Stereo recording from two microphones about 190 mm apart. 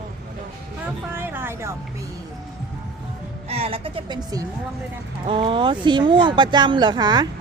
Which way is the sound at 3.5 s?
30° right (ahead or behind).